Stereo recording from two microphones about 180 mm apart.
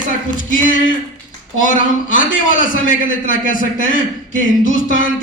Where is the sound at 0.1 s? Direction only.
45° left (ahead or behind).